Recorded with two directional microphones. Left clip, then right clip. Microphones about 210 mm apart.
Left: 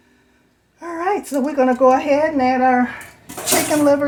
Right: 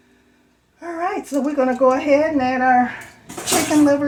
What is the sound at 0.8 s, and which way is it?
A woman's voice, 55° left (ahead or behind).